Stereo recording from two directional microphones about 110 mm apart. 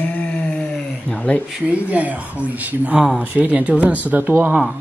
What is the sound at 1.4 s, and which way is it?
Speech, 10° right (ahead or behind).